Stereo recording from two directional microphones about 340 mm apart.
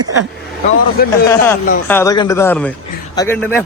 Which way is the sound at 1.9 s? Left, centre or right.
Centre.